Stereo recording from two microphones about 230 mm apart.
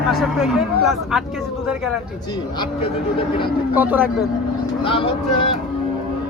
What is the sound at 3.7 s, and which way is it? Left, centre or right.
Speech, centre.